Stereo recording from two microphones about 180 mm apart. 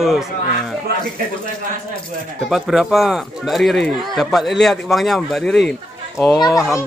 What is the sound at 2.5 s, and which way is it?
Speech, centre (ahead or behind).